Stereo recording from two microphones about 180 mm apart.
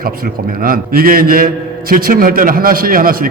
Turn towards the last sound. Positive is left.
turn(degrees=-50)  # may be behind; listen again after turning